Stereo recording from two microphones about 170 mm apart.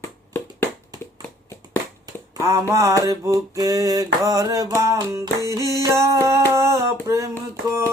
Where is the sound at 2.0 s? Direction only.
15° right (ahead or behind).